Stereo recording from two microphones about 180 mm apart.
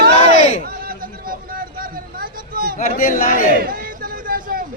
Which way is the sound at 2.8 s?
50° left (ahead or behind).